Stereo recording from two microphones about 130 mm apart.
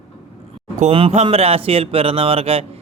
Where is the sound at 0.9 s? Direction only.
50° right (ahead or behind).